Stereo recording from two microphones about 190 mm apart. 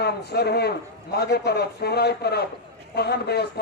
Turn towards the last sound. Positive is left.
turn(degrees=60)  # may be behind; listen again after turning